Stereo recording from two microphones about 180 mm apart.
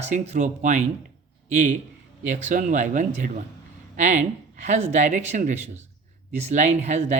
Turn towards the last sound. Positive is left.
turn(degrees=-40)  # may be behind; listen again after turning